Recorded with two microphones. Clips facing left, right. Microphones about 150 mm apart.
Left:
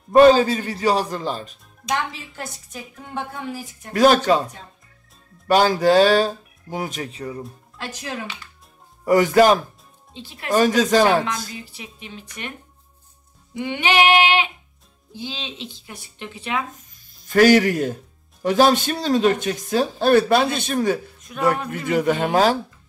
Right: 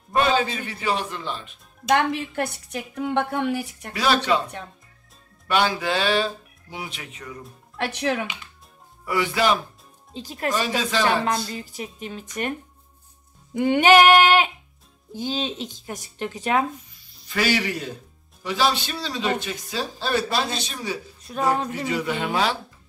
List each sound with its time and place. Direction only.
0.1 s speech: 40° left (ahead or behind)
2.0 s a woman's voice: 60° right (ahead or behind)
3.9 s speech: 45° left (ahead or behind)
5.5 s speech: 40° left (ahead or behind)
7.7 s speech: 65° right (ahead or behind)
9.0 s speech: 45° left (ahead or behind)
10.1 s speech: 40° right (ahead or behind)
10.5 s speech: 45° left (ahead or behind)
11.5 s speech: 45° right (ahead or behind)
16.9 s speech: 45° left (ahead or behind)
21.3 s speech: 35° right (ahead or behind)
21.6 s speech: 50° left (ahead or behind)